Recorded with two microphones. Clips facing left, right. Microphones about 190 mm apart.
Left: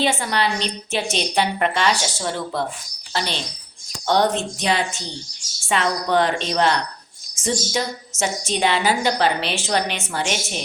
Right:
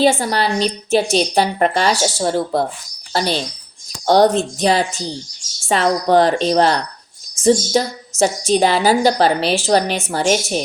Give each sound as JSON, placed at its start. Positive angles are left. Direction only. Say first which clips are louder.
{"t": 0.0, "sound": "a woman's voice", "louder": "right 6 dB", "side_deg": -35}